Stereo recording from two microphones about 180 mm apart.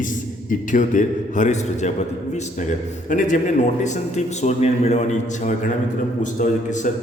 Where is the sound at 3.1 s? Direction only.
45° left (ahead or behind).